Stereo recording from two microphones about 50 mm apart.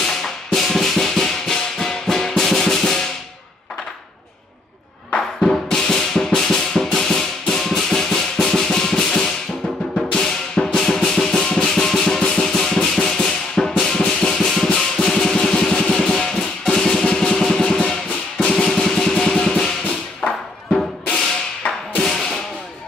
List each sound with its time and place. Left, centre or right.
0.0 s music: centre
5.1 s music: centre
18.5 s music: centre; by 20.4 s left
22.0 s whip: centre